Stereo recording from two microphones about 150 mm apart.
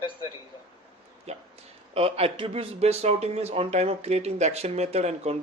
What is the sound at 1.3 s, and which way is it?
Speech, 45° right (ahead or behind).